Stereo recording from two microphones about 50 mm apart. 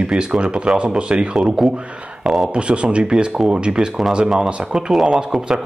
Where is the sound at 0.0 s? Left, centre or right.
Centre.